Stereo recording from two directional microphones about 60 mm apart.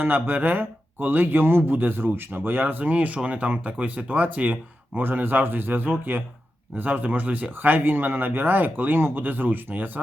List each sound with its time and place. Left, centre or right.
0.0 s speech: right